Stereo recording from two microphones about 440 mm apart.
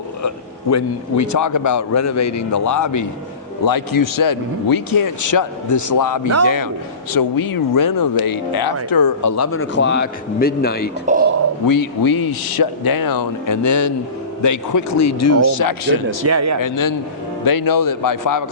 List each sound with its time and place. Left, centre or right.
0.2 s a man's voice: left
6.2 s speech: right
7.1 s speech: left
11.0 s speech: centre
11.6 s a man's voice: left
16.2 s speech: right
16.6 s speech: left